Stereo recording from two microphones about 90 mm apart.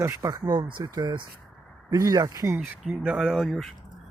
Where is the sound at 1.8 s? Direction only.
40° right (ahead or behind).